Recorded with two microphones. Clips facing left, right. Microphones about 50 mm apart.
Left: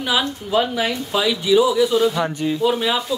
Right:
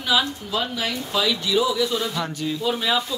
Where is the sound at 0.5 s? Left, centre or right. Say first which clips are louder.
Left 6 dB; left.